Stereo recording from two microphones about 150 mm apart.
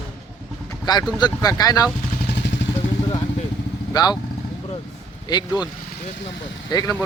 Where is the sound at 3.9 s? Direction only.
25° left (ahead or behind).